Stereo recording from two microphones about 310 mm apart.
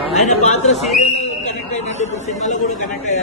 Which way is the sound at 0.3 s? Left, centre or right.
Left.